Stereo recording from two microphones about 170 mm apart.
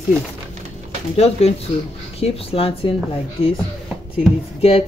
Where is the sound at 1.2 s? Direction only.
35° left (ahead or behind).